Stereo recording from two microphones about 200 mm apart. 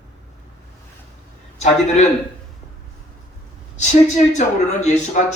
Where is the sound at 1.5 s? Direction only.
35° left (ahead or behind).